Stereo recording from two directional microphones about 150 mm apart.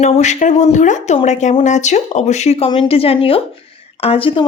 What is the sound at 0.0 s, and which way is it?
Speech, 50° left (ahead or behind).